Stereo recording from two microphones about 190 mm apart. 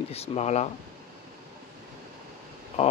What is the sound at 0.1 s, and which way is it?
Speech, 30° left (ahead or behind).